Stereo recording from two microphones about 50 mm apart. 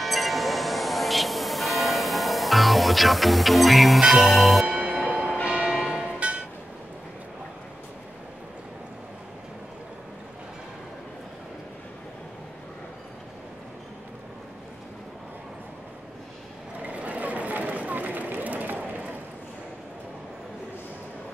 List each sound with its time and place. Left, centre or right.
0.0 s music: centre
4.6 s music: right
5.4 s church bell: right
16.8 s a sound: right